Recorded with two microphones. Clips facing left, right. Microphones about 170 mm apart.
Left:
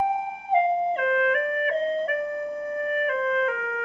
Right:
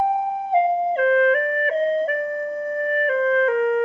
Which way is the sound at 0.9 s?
35° right (ahead or behind).